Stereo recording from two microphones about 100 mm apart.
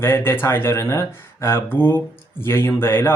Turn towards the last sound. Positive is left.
turn(degrees=25)  # may be behind; listen again after turning